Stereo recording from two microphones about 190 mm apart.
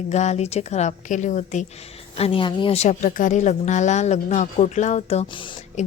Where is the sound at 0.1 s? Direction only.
35° left (ahead or behind).